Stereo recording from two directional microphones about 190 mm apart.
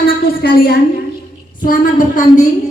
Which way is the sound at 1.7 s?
45° left (ahead or behind).